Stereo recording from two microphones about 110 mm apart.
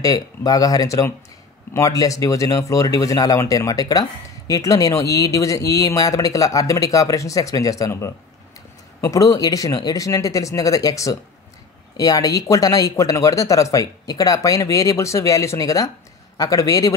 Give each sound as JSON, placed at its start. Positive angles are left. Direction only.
{"t": 0.0, "sound": "speech", "side_deg": 35}